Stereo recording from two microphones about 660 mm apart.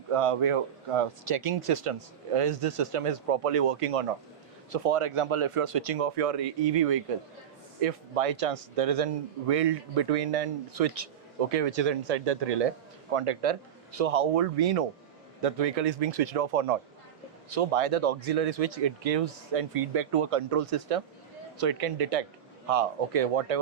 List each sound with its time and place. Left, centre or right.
0.1 s speech: right